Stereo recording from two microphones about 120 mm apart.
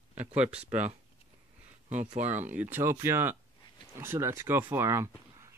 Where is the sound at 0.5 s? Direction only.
65° right (ahead or behind).